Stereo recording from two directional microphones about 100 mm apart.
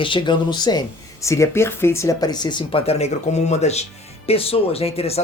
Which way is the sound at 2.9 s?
90° left.